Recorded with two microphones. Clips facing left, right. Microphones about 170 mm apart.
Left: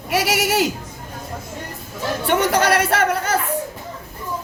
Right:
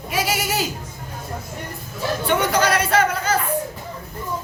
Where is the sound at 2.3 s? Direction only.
65° left (ahead or behind).